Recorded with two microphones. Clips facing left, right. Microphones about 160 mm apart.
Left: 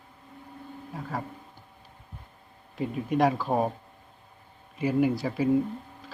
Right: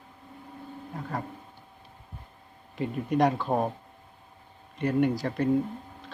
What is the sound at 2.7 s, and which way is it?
Speech, centre (ahead or behind).